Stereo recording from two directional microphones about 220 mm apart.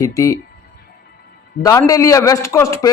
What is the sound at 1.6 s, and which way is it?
A man's voice, 15° left (ahead or behind).